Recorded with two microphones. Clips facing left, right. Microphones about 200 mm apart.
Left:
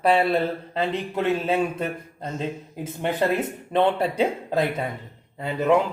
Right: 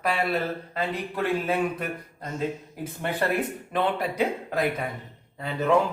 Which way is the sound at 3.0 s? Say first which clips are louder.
Left 3 dB; 20° left (ahead or behind).